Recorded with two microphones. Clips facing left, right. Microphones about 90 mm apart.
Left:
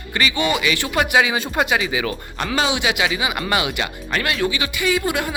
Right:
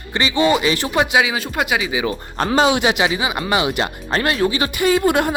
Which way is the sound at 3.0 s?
30° right (ahead or behind).